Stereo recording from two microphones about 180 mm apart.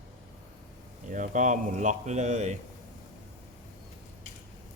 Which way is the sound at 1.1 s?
45° right (ahead or behind).